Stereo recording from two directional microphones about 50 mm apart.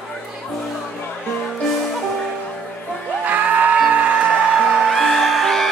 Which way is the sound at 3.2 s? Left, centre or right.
Right.